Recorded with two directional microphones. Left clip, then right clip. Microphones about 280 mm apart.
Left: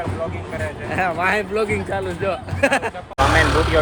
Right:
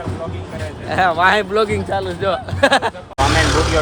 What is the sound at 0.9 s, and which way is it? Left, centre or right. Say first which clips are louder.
Speech: right 6 dB; centre.